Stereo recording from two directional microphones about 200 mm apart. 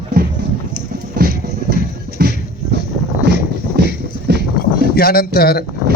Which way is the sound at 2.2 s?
55° right (ahead or behind).